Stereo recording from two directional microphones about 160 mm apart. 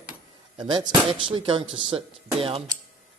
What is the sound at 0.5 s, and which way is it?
Speech, 25° right (ahead or behind).